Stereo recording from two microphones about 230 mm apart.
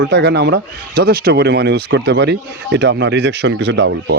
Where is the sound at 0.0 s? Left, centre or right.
Right.